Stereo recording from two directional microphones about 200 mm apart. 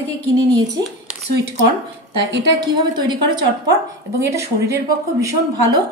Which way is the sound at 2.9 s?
20° right (ahead or behind).